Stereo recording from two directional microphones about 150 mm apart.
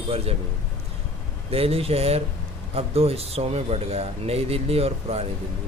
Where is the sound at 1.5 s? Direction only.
40° right (ahead or behind).